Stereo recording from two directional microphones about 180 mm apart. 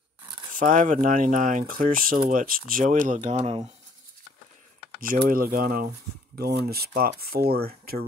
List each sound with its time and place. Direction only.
0.5 s speech: 50° right (ahead or behind)
5.0 s speech: 50° right (ahead or behind)